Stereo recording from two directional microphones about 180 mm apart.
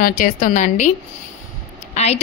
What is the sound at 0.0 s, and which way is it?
Speech, 45° left (ahead or behind).